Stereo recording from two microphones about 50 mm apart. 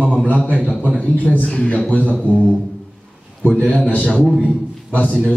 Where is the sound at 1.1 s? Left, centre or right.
Left.